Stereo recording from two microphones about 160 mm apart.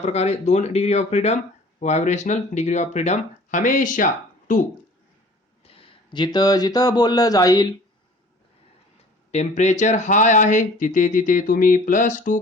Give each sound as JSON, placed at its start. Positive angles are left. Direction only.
{"t": 0.0, "sound": "speech", "side_deg": 40}
{"t": 5.6, "sound": "speech", "side_deg": 30}
{"t": 9.3, "sound": "speech", "side_deg": 45}